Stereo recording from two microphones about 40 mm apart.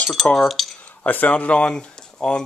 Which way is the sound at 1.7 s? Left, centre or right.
Centre.